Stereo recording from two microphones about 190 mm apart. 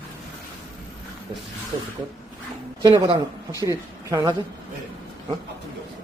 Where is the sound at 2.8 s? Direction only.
25° right (ahead or behind).